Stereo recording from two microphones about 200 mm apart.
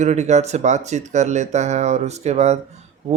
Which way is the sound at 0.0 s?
35° right (ahead or behind).